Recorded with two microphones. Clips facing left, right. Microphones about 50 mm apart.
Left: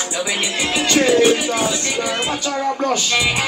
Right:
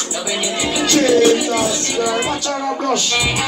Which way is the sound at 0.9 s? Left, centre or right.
Centre.